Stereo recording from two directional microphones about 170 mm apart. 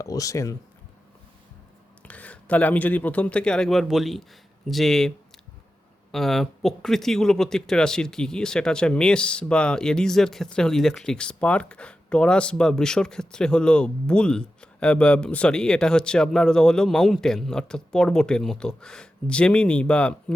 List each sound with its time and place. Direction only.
0.0 s speech: 20° left (ahead or behind)
2.0 s speech: 10° left (ahead or behind)